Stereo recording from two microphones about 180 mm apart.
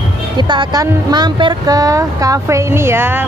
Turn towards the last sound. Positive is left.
turn(degrees=-10)  # may be behind; listen again after turning